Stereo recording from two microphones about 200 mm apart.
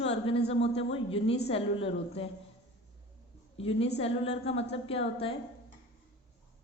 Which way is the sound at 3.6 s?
30° left (ahead or behind).